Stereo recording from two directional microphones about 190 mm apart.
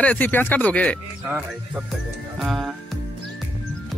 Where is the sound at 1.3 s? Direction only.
5° right (ahead or behind).